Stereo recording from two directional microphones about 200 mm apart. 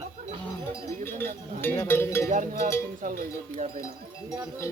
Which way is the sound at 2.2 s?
45° right (ahead or behind).